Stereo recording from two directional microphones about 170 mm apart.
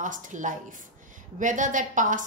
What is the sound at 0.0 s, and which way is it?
A woman's voice, 50° right (ahead or behind).